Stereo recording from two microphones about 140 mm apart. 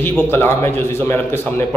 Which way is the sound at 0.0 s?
15° left (ahead or behind).